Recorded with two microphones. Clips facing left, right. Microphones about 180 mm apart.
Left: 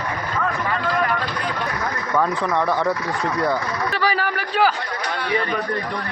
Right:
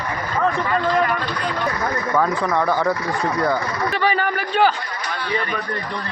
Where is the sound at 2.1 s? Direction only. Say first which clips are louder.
Even; centre (ahead or behind).